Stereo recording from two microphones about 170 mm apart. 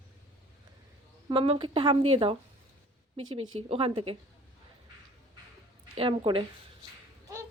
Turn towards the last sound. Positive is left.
turn(degrees=-30)  # may be behind; listen again after turning